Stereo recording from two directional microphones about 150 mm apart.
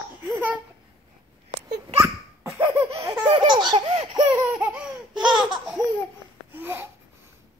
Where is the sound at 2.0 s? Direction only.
15° right (ahead or behind); by 4.2 s 30° right (ahead or behind).